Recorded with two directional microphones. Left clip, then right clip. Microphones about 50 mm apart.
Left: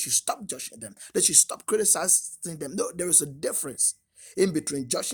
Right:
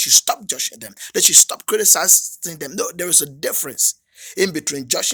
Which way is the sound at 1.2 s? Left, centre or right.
Left.